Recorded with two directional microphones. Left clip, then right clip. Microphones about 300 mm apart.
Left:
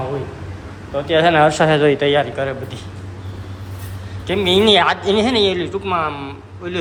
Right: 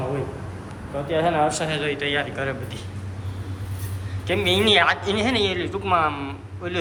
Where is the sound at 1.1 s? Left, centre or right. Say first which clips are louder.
Left 8 dB; left; by 2.8 s centre.